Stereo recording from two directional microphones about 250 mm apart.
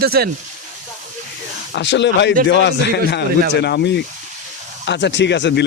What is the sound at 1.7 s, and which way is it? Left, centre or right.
A man's voice, left.